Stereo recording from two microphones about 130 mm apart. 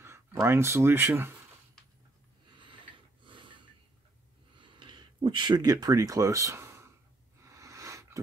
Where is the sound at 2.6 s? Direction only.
40° right (ahead or behind).